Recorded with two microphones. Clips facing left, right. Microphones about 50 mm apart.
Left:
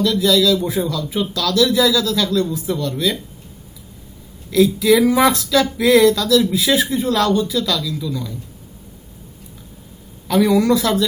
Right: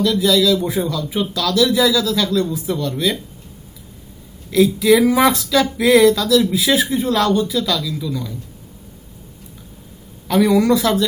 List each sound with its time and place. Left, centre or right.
0.0 s speech: centre
4.5 s speech: centre
10.2 s speech: centre